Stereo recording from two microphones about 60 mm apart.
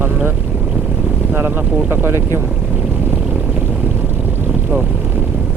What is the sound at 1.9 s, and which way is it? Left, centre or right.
Speech, right.